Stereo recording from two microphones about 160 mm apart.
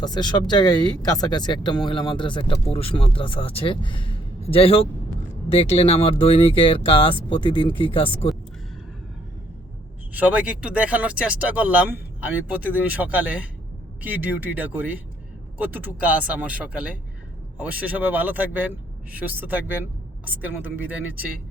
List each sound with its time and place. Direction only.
0.0 s speech: 25° left (ahead or behind)
10.1 s speech: 10° right (ahead or behind)